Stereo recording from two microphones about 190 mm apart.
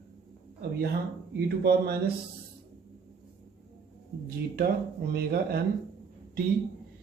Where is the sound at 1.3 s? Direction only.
55° right (ahead or behind).